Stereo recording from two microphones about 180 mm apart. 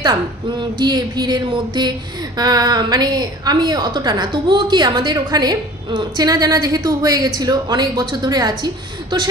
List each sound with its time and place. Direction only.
0.0 s a woman's voice: 20° right (ahead or behind)